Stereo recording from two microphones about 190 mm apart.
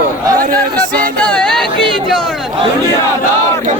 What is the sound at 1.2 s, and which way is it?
Music, 5° left (ahead or behind).